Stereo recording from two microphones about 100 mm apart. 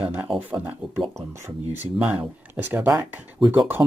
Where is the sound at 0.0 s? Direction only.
20° right (ahead or behind).